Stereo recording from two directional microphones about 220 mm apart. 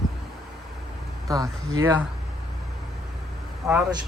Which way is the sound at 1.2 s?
15° right (ahead or behind).